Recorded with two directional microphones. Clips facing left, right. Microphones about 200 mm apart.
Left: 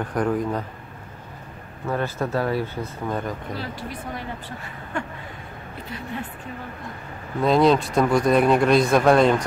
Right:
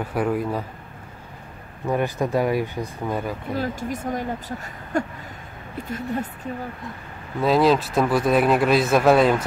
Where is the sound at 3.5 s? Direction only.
45° right (ahead or behind).